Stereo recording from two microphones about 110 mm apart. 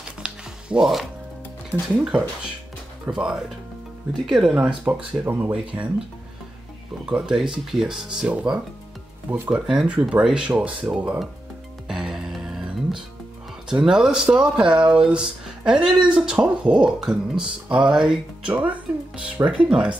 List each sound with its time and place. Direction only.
0.2 s music: 5° right (ahead or behind)
1.7 s speech: 15° right (ahead or behind)
4.8 s speech: 20° right (ahead or behind)
7.1 s speech: 5° right (ahead or behind)
11.9 s music: 5° right (ahead or behind)
13.7 s speech: 5° right (ahead or behind)